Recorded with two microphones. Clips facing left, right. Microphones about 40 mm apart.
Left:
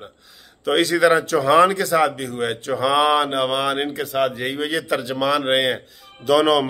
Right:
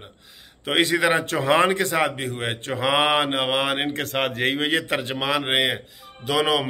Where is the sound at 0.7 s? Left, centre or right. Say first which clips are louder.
Left 4 dB; right.